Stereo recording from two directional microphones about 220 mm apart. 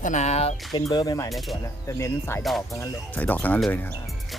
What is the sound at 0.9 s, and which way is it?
Speech, 15° left (ahead or behind).